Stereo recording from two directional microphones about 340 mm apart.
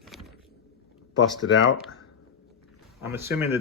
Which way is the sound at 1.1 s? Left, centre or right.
Left.